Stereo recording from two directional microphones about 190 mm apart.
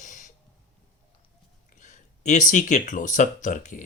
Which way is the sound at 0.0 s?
40° left (ahead or behind).